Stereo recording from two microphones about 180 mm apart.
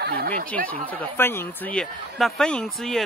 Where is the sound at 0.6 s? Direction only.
10° left (ahead or behind).